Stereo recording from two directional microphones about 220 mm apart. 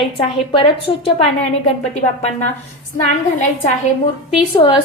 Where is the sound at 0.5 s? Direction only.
25° left (ahead or behind).